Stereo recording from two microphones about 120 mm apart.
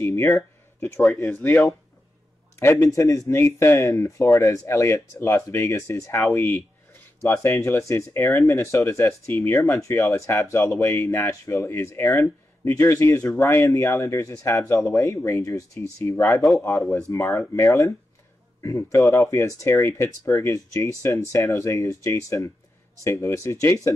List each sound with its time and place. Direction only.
0.0 s speech: 20° left (ahead or behind)
2.6 s speech: 25° left (ahead or behind)